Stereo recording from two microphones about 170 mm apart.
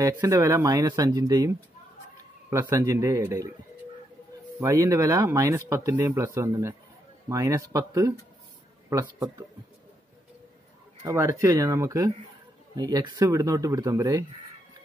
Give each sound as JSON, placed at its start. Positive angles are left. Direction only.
{"t": 0.0, "sound": "speech", "side_deg": -20}
{"t": 4.6, "sound": "speech", "side_deg": -20}
{"t": 11.1, "sound": "speech", "side_deg": -15}